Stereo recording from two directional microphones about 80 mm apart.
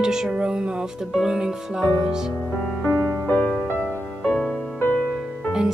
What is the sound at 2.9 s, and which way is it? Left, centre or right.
Music, centre.